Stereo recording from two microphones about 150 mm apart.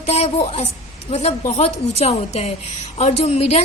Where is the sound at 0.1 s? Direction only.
45° left (ahead or behind).